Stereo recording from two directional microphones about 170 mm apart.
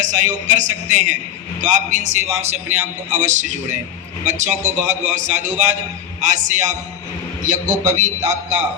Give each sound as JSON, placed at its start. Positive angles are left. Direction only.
{"t": 0.0, "sound": "a man's voice", "side_deg": -45}